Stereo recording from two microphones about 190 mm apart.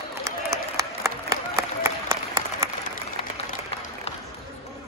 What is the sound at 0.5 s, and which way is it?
Applause, 15° right (ahead or behind).